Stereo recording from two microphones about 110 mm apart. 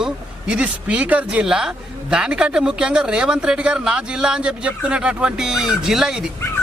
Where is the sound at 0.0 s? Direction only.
10° right (ahead or behind).